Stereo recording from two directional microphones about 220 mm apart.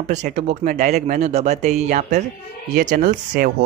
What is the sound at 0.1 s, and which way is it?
Speech, 35° right (ahead or behind).